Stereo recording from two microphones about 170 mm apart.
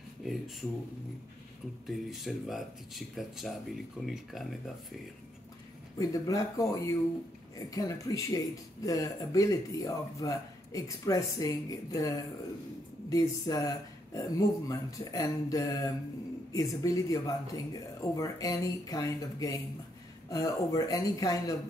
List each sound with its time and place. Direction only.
0.2 s speech: centre (ahead or behind)
1.9 s speech: centre (ahead or behind)
5.9 s speech: 20° left (ahead or behind)